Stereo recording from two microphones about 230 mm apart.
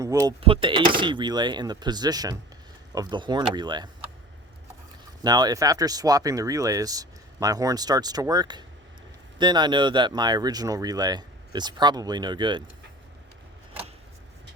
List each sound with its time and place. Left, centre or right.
0.0 s speech: centre
5.2 s speech: centre